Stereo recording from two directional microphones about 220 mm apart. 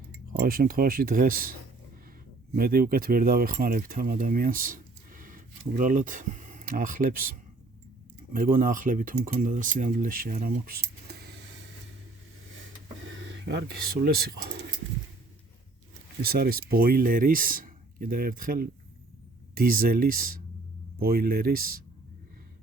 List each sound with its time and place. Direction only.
0.4 s speech: 40° right (ahead or behind)
8.3 s speech: 40° right (ahead or behind)
12.5 s a sound: 60° right (ahead or behind)
16.2 s speech: 45° right (ahead or behind)